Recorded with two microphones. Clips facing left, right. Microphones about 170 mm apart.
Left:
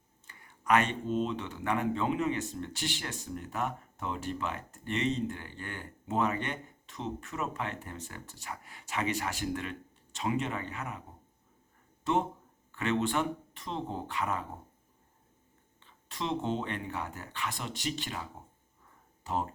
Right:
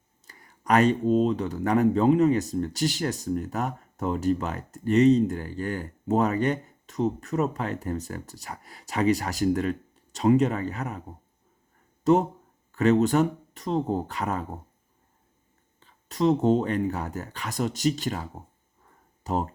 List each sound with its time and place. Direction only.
0.3 s speech: 40° right (ahead or behind)
12.1 s speech: 40° right (ahead or behind)
15.8 s speech: 40° right (ahead or behind)